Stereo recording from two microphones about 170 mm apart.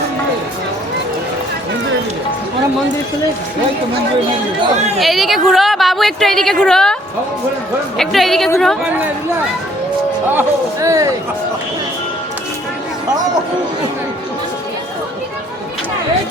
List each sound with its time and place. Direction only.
4.9 s a woman's voice: centre (ahead or behind)
7.9 s a woman's voice: centre (ahead or behind)
10.3 s speech: 20° right (ahead or behind)